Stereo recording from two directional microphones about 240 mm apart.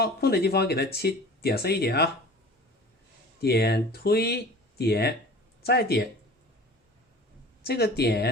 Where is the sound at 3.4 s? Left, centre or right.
Left.